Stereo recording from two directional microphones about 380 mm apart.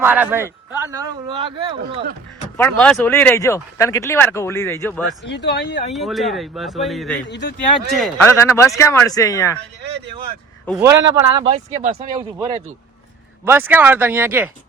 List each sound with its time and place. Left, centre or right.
0.0 s speech: centre
2.6 s speech: centre
5.2 s speech: left
5.9 s a man's voice: centre
7.3 s speech: left
7.9 s speech: centre
10.7 s a man's voice: centre